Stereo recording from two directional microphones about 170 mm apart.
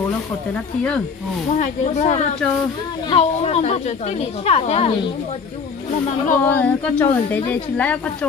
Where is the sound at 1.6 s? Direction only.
45° left (ahead or behind).